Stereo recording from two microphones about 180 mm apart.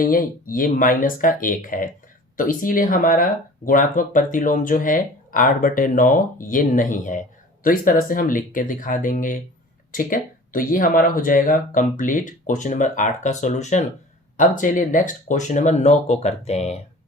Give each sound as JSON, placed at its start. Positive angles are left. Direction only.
{"t": 0.0, "sound": "speech", "side_deg": 50}